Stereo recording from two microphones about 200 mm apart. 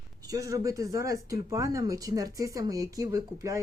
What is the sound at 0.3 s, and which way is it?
Speech, 15° right (ahead or behind).